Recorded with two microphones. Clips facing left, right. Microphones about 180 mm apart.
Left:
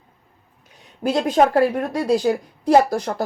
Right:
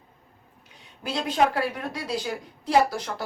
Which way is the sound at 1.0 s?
45° left (ahead or behind).